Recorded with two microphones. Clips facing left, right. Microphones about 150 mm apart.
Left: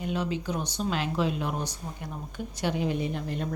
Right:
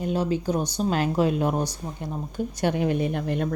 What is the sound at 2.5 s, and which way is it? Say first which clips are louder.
Speech: right 4 dB; 55° right (ahead or behind).